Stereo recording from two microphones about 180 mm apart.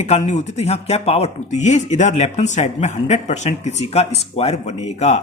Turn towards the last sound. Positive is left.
turn(degrees=35)  # may be behind; listen again after turning